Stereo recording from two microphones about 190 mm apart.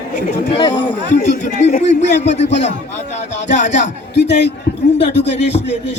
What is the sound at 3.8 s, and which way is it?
Speech, 65° left (ahead or behind).